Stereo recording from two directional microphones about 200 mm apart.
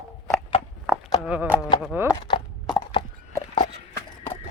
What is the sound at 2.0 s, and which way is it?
Horse, 20° left (ahead or behind).